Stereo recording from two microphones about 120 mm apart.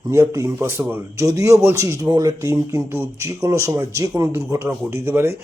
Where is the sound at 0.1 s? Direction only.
25° right (ahead or behind).